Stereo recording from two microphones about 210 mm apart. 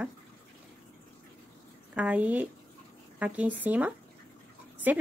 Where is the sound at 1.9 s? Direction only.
5° right (ahead or behind).